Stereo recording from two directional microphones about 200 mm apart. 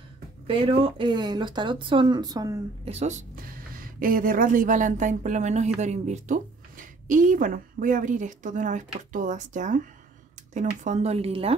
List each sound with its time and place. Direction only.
0.5 s speech: 25° right (ahead or behind)
2.8 s a woman's voice: 30° right (ahead or behind)
3.3 s a woman's voice: 45° right (ahead or behind); by 11.5 s 30° right (ahead or behind)